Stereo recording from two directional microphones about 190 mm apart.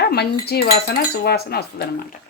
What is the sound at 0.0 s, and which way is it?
Speech, 55° left (ahead or behind).